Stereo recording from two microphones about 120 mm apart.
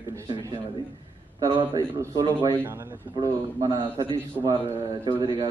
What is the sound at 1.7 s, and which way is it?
A man's voice, 30° right (ahead or behind).